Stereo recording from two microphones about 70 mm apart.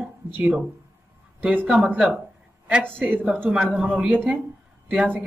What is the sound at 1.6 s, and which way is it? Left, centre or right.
Speech, centre.